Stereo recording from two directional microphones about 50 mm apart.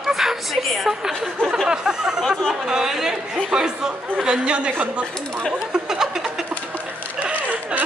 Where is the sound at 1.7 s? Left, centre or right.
Centre.